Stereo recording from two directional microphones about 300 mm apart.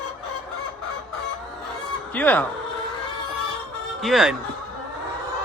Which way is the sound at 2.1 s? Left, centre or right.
Centre.